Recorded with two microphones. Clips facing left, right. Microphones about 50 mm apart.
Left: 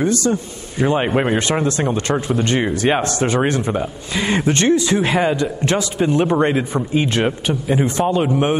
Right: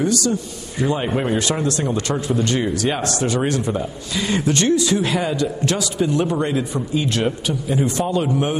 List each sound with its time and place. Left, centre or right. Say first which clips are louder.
0.0 s a man's voice: left 2 dB; left